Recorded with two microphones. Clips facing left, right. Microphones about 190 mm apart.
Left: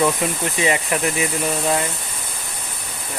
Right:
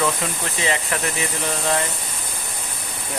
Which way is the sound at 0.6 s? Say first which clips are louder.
Left 3 dB; 15° left (ahead or behind).